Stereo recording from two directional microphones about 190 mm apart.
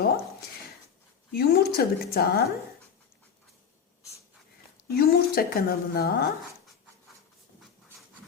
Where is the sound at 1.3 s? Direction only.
55° left (ahead or behind).